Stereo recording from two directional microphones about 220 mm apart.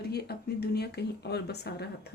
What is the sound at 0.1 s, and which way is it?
A woman's voice, 45° left (ahead or behind).